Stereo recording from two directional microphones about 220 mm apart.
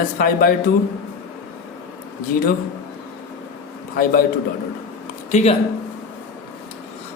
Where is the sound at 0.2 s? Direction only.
40° left (ahead or behind).